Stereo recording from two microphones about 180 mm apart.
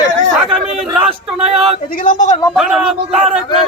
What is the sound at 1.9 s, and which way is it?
Speech, 50° left (ahead or behind).